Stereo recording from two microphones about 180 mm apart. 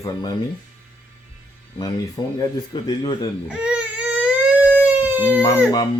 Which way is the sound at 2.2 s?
20° left (ahead or behind).